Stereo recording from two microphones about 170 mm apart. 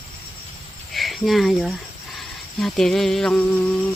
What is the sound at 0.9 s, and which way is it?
Speech, centre (ahead or behind).